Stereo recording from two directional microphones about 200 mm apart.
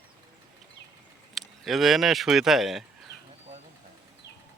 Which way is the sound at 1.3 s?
Centre (ahead or behind).